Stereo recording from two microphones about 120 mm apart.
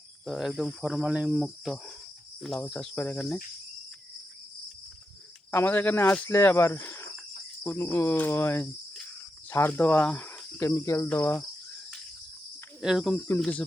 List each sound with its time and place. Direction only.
0.3 s cricket: centre (ahead or behind); by 3.2 s 15° left (ahead or behind)
3.2 s cricket: 5° left (ahead or behind)
5.5 s cricket: 20° left (ahead or behind)
12.8 s cricket: centre (ahead or behind)
13.1 s cricket: 20° left (ahead or behind)